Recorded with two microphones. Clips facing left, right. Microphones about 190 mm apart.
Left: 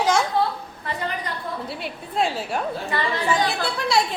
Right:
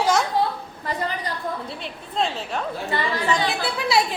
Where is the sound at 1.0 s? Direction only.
35° right (ahead or behind).